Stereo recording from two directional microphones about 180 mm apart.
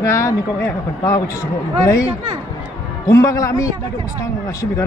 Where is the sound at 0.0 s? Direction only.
15° left (ahead or behind).